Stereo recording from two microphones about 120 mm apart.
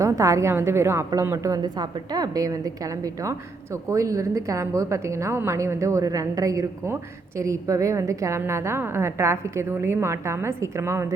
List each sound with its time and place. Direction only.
0.0 s a woman's voice: 25° right (ahead or behind)